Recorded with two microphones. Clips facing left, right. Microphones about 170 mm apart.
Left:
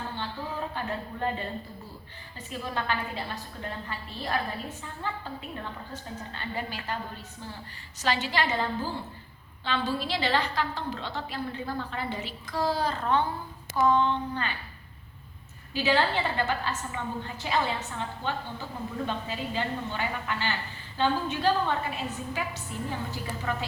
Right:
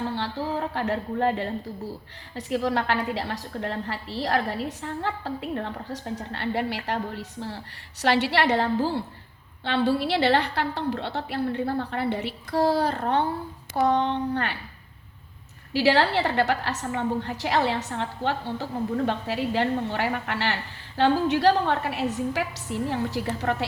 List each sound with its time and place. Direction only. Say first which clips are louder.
0.1 s a sound: right 7 dB; 80° right
2.3 s a woman's voice: right 9 dB; 80° right; by 14.5 s 65° right (ahead or behind)
15.7 s a woman's voice: right 5 dB; 75° right (ahead or behind)